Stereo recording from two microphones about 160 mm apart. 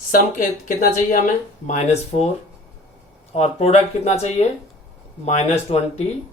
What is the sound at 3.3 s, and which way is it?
Speech, 40° left (ahead or behind).